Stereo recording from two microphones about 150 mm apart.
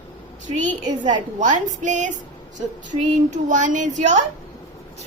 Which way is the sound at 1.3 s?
55° right (ahead or behind).